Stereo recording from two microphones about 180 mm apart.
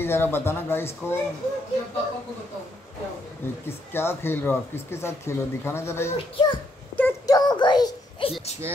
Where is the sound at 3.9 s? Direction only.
10° left (ahead or behind).